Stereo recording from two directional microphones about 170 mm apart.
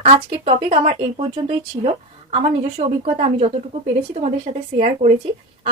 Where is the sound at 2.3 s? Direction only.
35° right (ahead or behind).